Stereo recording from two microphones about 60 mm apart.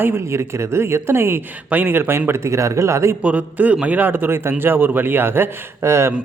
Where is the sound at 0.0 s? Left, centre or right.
Right.